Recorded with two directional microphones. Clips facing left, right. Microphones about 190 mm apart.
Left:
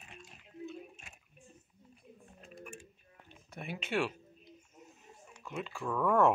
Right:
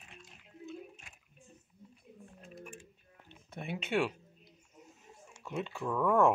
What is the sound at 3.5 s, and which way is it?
Speech, 25° right (ahead or behind).